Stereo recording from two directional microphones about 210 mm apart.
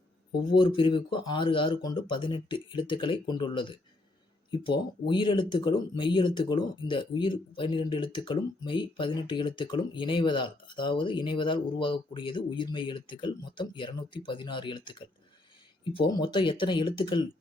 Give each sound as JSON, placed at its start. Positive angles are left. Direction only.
{"t": 0.5, "sound": "speech", "side_deg": 25}